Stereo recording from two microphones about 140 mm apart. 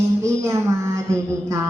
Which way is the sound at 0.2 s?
20° right (ahead or behind).